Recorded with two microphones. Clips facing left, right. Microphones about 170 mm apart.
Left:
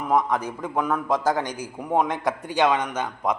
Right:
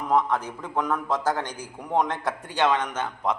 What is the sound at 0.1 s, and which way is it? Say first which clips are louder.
A man's voice: left 1 dB; 10° left (ahead or behind).